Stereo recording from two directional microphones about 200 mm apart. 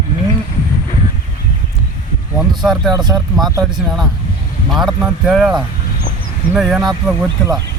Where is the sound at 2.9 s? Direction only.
20° right (ahead or behind).